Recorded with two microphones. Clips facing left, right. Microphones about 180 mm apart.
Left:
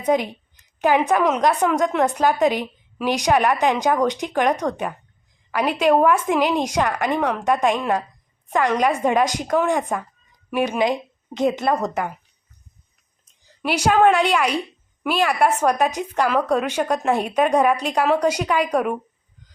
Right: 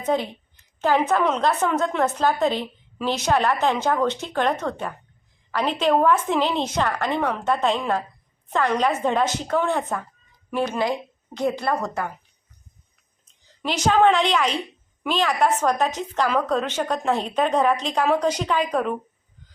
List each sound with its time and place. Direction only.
0.0 s a woman's voice: 15° left (ahead or behind)
13.2 s a woman's voice: 10° left (ahead or behind)